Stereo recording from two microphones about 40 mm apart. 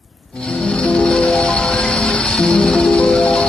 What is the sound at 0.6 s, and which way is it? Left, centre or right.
Music, left.